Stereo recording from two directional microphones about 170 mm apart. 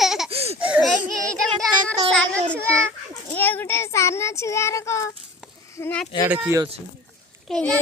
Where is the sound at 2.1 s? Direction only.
5° left (ahead or behind).